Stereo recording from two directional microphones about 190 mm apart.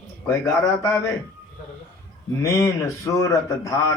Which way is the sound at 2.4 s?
15° left (ahead or behind).